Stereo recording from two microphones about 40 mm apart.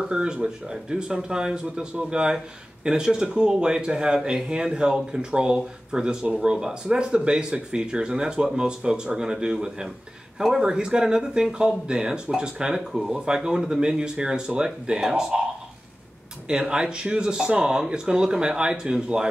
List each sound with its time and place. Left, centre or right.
0.1 s speech: centre
16.4 s speech: right